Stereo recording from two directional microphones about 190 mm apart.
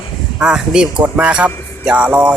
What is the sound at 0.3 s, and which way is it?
Speech, 5° right (ahead or behind).